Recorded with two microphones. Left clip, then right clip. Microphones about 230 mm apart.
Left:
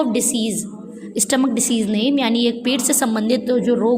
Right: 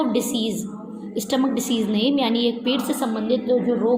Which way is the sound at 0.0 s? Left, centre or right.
Left.